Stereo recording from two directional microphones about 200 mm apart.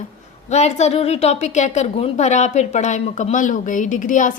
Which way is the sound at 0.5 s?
35° left (ahead or behind).